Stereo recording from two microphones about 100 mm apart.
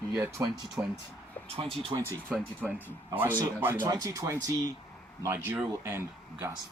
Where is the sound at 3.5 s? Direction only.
20° right (ahead or behind).